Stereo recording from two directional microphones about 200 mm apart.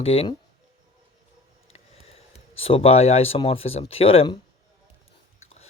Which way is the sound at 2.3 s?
30° left (ahead or behind).